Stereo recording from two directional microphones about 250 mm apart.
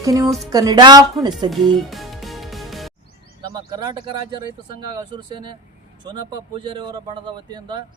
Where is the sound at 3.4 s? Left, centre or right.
Centre.